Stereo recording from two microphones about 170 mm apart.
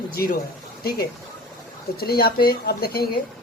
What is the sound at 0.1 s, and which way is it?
Speech, 60° left (ahead or behind).